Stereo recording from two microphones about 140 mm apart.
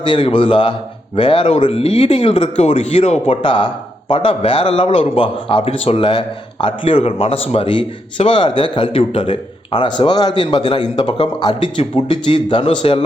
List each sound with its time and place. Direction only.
0.0 s a man's voice: 35° left (ahead or behind)